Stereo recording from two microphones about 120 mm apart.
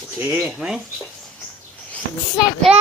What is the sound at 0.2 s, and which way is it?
Speech, 15° right (ahead or behind).